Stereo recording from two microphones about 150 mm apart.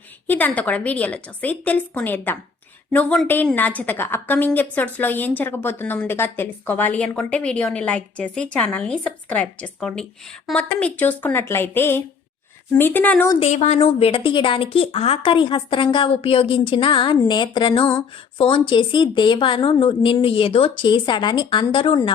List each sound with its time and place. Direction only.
0.3 s a woman's voice: 10° left (ahead or behind)
13.4 s a woman's voice: 50° left (ahead or behind); by 22.1 s 35° left (ahead or behind)